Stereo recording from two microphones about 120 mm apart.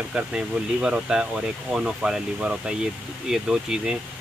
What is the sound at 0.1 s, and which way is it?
Speech, 10° right (ahead or behind).